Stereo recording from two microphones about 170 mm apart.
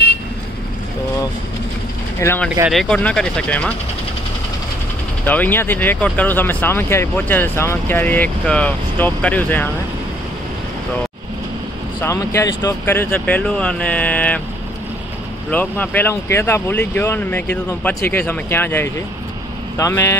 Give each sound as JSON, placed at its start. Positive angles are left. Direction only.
{"t": 2.1, "sound": "speech", "side_deg": 15}
{"t": 2.7, "sound": "speech", "side_deg": 5}
{"t": 5.2, "sound": "speech", "side_deg": 10}
{"t": 12.0, "sound": "speech", "side_deg": 15}
{"t": 15.5, "sound": "speech", "side_deg": 10}